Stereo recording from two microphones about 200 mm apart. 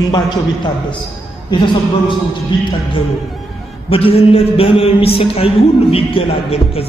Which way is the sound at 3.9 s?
30° left (ahead or behind).